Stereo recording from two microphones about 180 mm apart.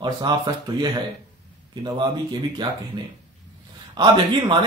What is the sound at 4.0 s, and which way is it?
Speech, 25° right (ahead or behind).